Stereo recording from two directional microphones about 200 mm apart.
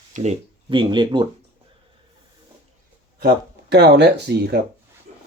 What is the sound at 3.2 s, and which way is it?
Speech, 50° right (ahead or behind).